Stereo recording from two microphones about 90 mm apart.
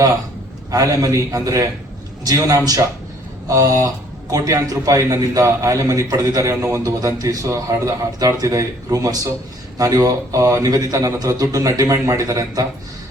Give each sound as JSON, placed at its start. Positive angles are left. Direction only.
{"t": 0.7, "sound": "a man's voice", "side_deg": -40}